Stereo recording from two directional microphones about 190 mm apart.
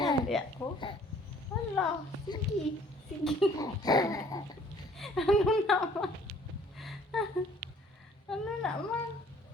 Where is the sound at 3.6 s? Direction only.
20° left (ahead or behind).